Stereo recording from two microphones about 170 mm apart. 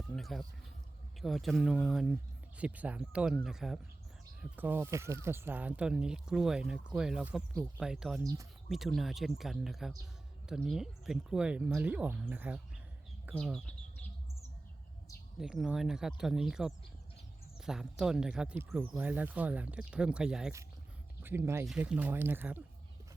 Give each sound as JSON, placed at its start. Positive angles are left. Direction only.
{"t": 0.1, "sound": "a sound", "side_deg": 0}
{"t": 1.2, "sound": "speech", "side_deg": 0}
{"t": 8.2, "sound": "speech", "side_deg": -20}
{"t": 8.7, "sound": "speech", "side_deg": 0}
{"t": 15.4, "sound": "speech", "side_deg": -5}